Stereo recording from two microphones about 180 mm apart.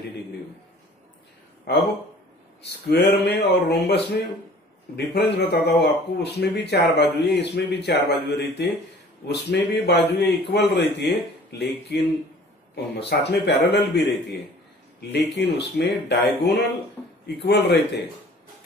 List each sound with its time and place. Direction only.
2.6 s a man's voice: 70° left (ahead or behind)